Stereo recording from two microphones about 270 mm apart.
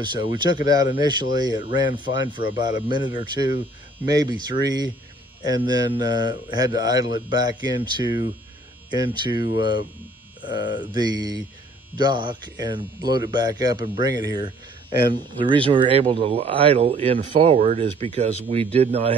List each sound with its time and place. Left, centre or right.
0.0 s speech: centre
9.1 s speech: centre